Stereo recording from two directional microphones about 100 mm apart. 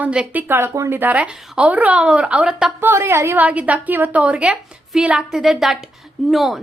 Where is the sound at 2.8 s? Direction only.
25° right (ahead or behind).